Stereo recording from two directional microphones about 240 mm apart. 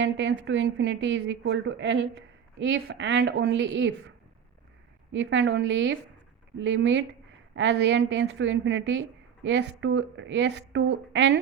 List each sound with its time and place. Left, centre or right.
0.0 s a woman's voice: right
5.1 s a woman's voice: right